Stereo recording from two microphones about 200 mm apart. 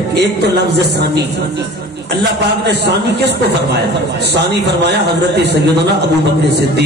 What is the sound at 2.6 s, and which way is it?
Speech, 55° right (ahead or behind).